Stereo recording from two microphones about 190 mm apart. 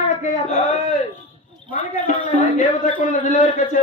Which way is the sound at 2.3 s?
40° left (ahead or behind).